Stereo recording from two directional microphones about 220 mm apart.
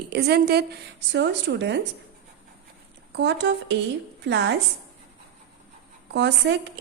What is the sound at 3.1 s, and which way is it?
A woman's voice, 50° right (ahead or behind).